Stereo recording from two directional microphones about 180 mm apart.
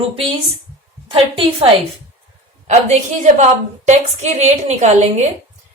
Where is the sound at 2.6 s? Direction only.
40° right (ahead or behind).